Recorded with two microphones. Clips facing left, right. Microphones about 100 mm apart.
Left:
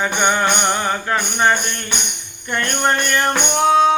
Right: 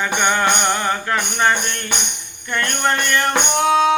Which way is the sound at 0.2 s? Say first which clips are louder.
Even; 25° left (ahead or behind).